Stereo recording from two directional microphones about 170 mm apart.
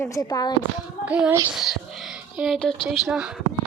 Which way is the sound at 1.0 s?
5° right (ahead or behind).